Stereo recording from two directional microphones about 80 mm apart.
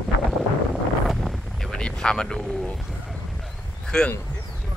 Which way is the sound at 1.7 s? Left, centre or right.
Centre.